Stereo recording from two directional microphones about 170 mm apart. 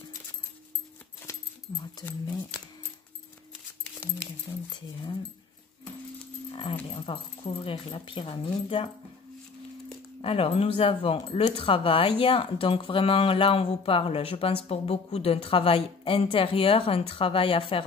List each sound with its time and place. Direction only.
6.5 s speech: 30° left (ahead or behind)
10.2 s speech: 35° left (ahead or behind)